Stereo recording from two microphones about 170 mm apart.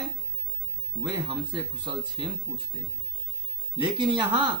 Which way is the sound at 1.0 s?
25° right (ahead or behind).